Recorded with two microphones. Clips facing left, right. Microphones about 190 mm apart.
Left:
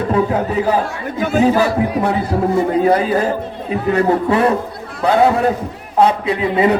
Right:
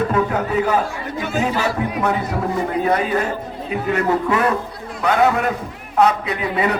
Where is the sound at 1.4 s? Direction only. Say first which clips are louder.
Left 7 dB; 35° left (ahead or behind).